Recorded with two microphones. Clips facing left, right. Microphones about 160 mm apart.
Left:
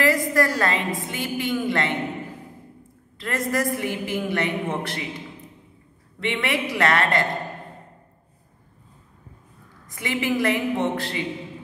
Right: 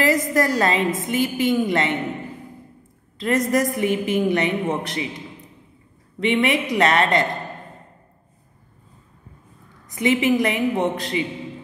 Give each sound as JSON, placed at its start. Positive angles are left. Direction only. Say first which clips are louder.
{"t": 0.0, "sound": "a woman's voice", "louder": "right 1 dB", "side_deg": -20}
{"t": 3.2, "sound": "a woman's voice", "louder": "right 5 dB", "side_deg": -20}
{"t": 6.1, "sound": "a woman's voice", "louder": "right 6 dB", "side_deg": -20}
{"t": 9.8, "sound": "a woman's voice", "louder": "right 7 dB", "side_deg": -20}